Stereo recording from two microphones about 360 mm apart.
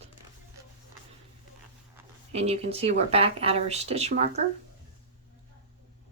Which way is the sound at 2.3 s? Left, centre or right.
Centre.